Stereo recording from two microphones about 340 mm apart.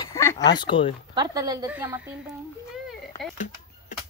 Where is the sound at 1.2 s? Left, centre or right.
Centre.